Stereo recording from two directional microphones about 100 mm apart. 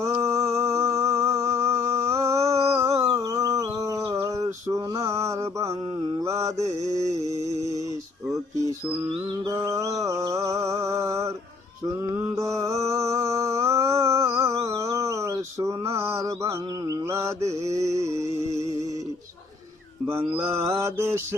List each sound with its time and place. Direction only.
0.0 s a sound: 30° right (ahead or behind)
3.2 s humming: 35° right (ahead or behind)
4.1 s mantra: 35° right (ahead or behind)
9.5 s a sound: 30° right (ahead or behind)
10.0 s mantra: 35° right (ahead or behind)
20.1 s mantra: 20° right (ahead or behind)